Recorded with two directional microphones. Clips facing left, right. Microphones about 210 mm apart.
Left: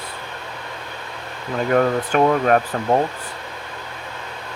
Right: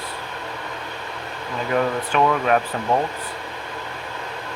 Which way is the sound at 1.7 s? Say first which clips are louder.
Left 3 dB; 45° left (ahead or behind).